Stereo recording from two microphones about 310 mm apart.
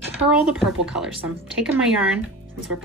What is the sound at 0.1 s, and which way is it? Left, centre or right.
A woman's voice, centre.